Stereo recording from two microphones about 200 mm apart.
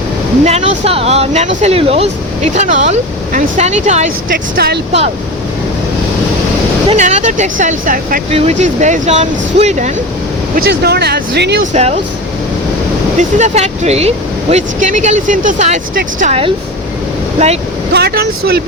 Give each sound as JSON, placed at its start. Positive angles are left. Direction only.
{"t": 0.4, "sound": "speech", "side_deg": -30}
{"t": 6.8, "sound": "speech", "side_deg": -35}
{"t": 10.7, "sound": "speech", "side_deg": -55}
{"t": 11.6, "sound": "speech", "side_deg": -35}
{"t": 13.1, "sound": "speech", "side_deg": -35}
{"t": 17.9, "sound": "speech", "side_deg": -50}